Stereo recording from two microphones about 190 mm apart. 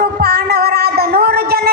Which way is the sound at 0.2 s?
55° right (ahead or behind).